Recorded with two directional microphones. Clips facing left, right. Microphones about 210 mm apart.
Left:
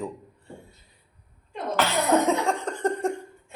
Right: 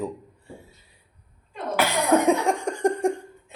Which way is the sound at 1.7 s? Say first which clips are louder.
Right 1 dB; 10° right (ahead or behind).